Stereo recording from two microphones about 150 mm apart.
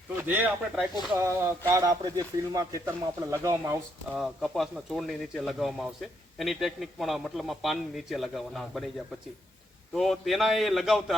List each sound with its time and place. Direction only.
0.2 s speech: 10° right (ahead or behind)
1.1 s speech: 20° right (ahead or behind)
4.1 s speech: centre (ahead or behind)
9.9 s speech: centre (ahead or behind)